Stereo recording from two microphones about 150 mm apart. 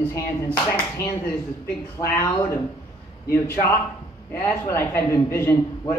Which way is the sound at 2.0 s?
15° left (ahead or behind).